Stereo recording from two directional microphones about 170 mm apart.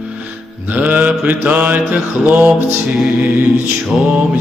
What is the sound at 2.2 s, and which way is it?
Chant, 10° right (ahead or behind).